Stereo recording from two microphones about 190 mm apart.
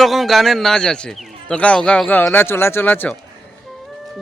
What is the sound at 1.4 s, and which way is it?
A man's voice, 5° left (ahead or behind).